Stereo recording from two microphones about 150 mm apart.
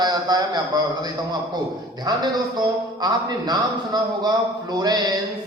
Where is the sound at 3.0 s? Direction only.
25° right (ahead or behind).